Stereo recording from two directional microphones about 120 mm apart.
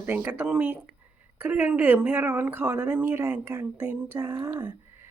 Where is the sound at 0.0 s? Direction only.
20° right (ahead or behind).